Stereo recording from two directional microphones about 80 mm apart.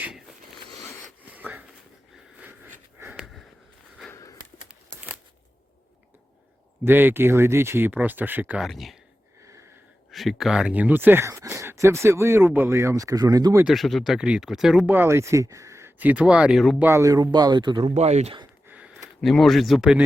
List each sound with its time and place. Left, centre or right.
1.3 s wheeze: right
2.4 s sniff: right
4.1 s a sound: left
4.7 s crumpling: centre
6.8 s speech: right
8.6 s speech: centre
10.1 s speech: centre; by 13.7 s right
13.7 s speech: centre
14.8 s speech: right
16.0 s speech: centre
16.6 s speech: centre
16.8 s speech: right
19.2 s speech: centre